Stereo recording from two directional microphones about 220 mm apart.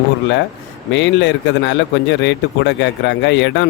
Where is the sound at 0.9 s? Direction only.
55° left (ahead or behind).